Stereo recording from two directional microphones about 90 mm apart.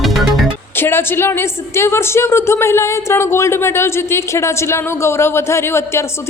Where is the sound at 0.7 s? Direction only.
25° left (ahead or behind).